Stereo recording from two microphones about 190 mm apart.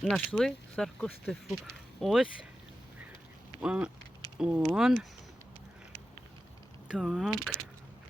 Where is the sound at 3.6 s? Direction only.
5° right (ahead or behind).